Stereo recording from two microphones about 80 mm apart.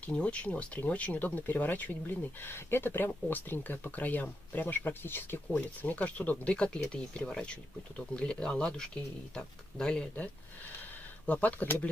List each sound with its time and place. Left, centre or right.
0.0 s speech: centre
11.2 s speech: centre